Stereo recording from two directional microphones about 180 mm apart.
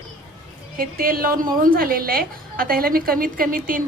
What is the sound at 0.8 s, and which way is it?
A woman's voice, 55° right (ahead or behind).